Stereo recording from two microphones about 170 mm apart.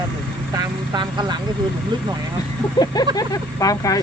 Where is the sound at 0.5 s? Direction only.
25° right (ahead or behind).